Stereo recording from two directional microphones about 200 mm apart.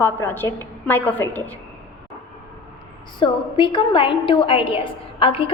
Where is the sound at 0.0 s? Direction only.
10° left (ahead or behind).